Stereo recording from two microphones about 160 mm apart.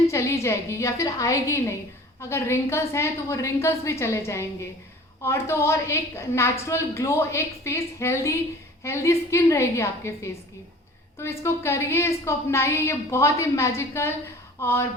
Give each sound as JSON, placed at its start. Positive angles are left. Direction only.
{"t": 0.1, "sound": "a woman's voice", "side_deg": 20}